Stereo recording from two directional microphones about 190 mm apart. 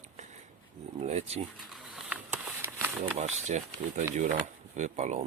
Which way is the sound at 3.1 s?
35° right (ahead or behind).